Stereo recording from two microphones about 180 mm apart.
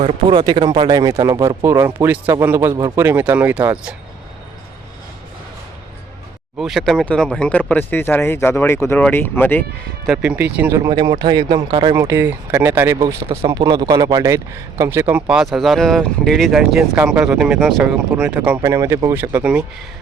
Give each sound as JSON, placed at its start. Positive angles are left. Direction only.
{"t": 0.0, "sound": "speech", "side_deg": -25}
{"t": 6.6, "sound": "speech", "side_deg": 0}
{"t": 10.1, "sound": "speech", "side_deg": -10}
{"t": 10.8, "sound": "speech", "side_deg": -25}
{"t": 11.9, "sound": "speech", "side_deg": -15}
{"t": 13.2, "sound": "speech", "side_deg": -30}
{"t": 13.5, "sound": "speech", "side_deg": -20}